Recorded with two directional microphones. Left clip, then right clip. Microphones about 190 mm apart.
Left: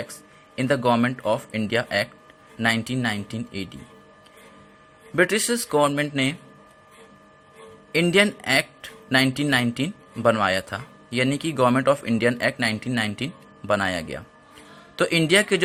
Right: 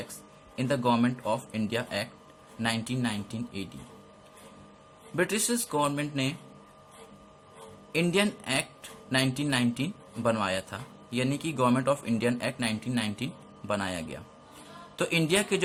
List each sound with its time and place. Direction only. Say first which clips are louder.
0.5 s speech: left 6 dB; 35° left (ahead or behind)
5.1 s speech: left 8 dB; 35° left (ahead or behind)
7.9 s speech: left 8 dB; 35° left (ahead or behind)